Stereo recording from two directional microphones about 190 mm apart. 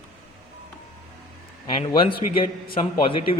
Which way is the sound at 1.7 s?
25° left (ahead or behind).